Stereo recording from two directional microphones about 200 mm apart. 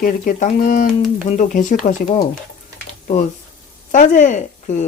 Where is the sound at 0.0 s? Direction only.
40° left (ahead or behind).